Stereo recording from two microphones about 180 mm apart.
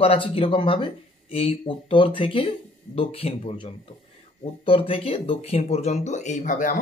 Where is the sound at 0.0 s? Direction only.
30° left (ahead or behind).